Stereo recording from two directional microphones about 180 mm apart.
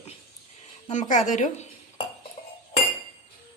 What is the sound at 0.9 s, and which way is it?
Speech, 40° left (ahead or behind).